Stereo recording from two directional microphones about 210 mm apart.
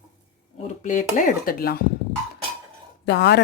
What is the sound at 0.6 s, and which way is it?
Speech, 35° left (ahead or behind).